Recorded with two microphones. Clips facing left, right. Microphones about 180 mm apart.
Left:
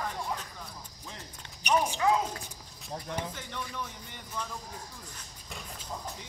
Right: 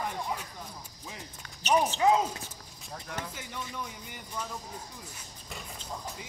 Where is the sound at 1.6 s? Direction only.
15° left (ahead or behind).